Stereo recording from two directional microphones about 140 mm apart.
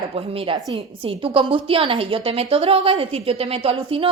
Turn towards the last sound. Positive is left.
turn(degrees=-45)  # may be behind; listen again after turning